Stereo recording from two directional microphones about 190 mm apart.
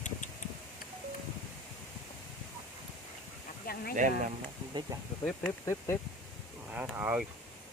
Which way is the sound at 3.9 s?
40° right (ahead or behind).